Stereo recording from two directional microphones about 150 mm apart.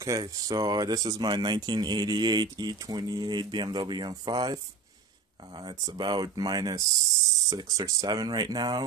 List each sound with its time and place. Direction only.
0.0 s speech: 25° right (ahead or behind)
5.6 s speech: 30° right (ahead or behind)